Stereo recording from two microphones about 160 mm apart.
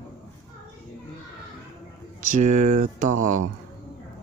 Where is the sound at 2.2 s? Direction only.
55° right (ahead or behind).